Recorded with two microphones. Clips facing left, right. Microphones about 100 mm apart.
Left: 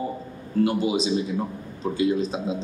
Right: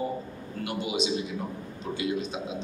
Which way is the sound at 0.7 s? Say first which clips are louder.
Left 2 dB; 35° left (ahead or behind).